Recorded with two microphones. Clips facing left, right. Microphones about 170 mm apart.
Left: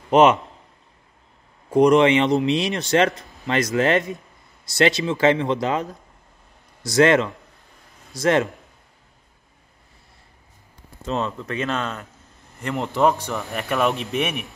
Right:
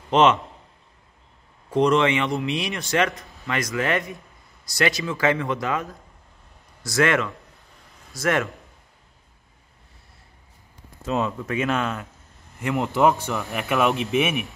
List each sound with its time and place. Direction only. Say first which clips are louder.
0.1 s a man's voice: left 3 dB; 10° left (ahead or behind)
1.7 s speech: left 5 dB; 15° left (ahead or behind); by 8.5 s 30° left (ahead or behind)
11.0 s speech: right 1 dB; 5° right (ahead or behind)